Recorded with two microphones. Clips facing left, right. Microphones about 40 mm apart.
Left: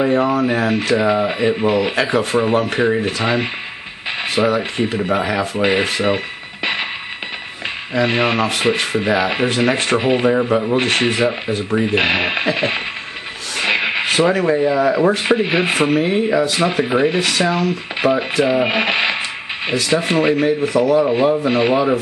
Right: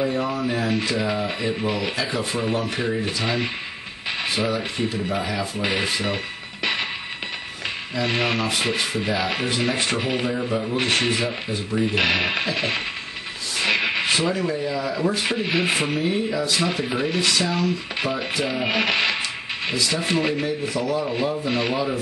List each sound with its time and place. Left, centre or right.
0.0 s speech: left
2.0 s speech: left
3.2 s speech: left
4.6 s speech: left
6.0 s music: centre
7.9 s speech: left
9.9 s speech: left
13.6 s music: centre
14.0 s a sound: left
14.3 s speech: left
15.2 s speech: left
15.9 s speech: left
20.3 s speech: left
21.5 s speech: left